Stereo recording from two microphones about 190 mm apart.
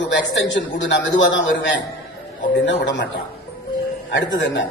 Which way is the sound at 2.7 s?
65° left (ahead or behind).